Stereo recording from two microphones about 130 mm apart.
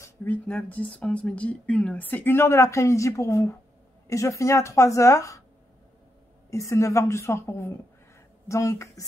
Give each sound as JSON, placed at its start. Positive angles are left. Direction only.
{"t": 0.0, "sound": "a woman's voice", "side_deg": 15}
{"t": 6.5, "sound": "a woman's voice", "side_deg": 25}